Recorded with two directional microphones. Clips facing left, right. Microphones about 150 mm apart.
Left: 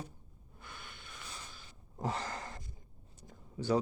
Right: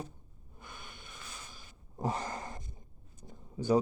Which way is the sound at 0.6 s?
15° right (ahead or behind).